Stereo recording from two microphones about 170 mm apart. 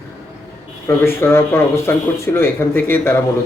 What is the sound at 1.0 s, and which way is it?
Speech, 15° left (ahead or behind).